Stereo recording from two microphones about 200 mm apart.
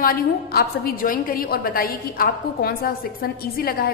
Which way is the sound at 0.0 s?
50° left (ahead or behind).